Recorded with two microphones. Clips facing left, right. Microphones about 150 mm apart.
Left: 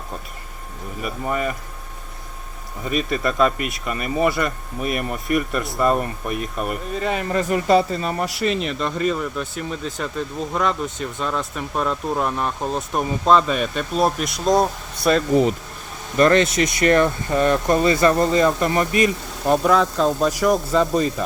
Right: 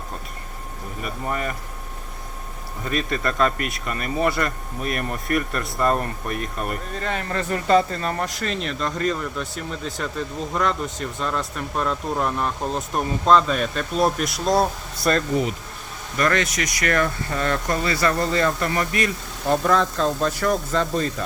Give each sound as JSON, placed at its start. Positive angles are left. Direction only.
{"t": 1.0, "sound": "speech", "side_deg": 5}
{"t": 2.8, "sound": "speech", "side_deg": 5}
{"t": 16.1, "sound": "speech", "side_deg": 25}